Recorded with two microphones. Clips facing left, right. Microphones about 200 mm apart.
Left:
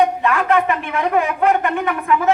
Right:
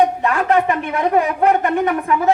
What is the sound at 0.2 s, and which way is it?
A woman's voice, 40° right (ahead or behind).